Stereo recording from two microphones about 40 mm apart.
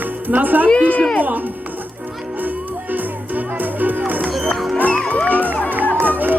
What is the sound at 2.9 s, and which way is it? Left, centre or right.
Music, right.